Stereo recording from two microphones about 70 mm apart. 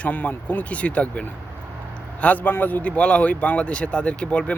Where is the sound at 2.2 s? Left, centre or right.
Left.